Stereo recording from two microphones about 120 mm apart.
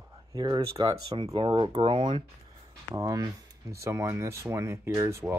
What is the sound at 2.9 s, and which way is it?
Speech, 25° right (ahead or behind).